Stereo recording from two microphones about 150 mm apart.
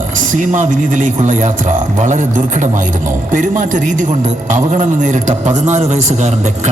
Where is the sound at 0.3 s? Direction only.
55° right (ahead or behind).